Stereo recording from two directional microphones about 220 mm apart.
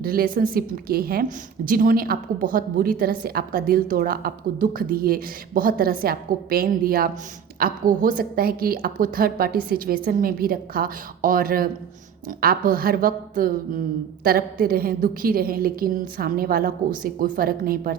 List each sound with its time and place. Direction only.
0.0 s a woman's voice: 40° right (ahead or behind)